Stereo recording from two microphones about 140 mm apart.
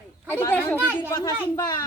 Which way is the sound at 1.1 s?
25° left (ahead or behind).